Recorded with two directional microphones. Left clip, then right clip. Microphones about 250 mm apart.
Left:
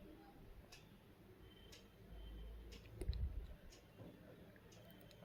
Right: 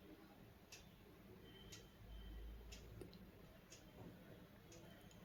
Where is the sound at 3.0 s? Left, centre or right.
Centre.